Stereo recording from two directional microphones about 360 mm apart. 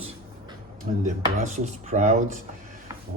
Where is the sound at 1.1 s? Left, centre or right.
Centre.